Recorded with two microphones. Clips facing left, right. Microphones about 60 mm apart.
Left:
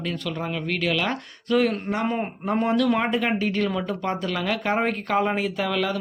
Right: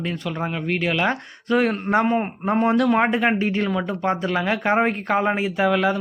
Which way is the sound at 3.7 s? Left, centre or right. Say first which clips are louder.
Right 4 dB; centre.